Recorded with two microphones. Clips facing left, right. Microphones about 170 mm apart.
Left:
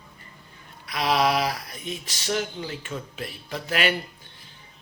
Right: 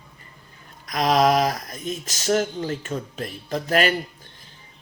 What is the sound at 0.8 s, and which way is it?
Speech, 45° right (ahead or behind).